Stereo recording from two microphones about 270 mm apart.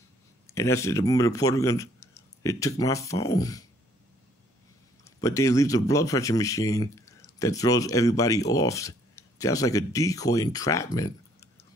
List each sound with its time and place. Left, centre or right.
0.5 s speech: centre
5.0 s speech: centre